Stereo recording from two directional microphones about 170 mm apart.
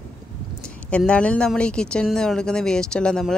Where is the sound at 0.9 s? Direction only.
5° left (ahead or behind).